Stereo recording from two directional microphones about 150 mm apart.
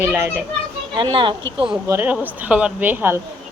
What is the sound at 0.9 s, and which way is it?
Speech, 30° right (ahead or behind).